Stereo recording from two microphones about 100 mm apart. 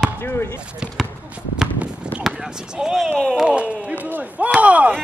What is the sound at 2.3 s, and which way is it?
Speech, 5° right (ahead or behind).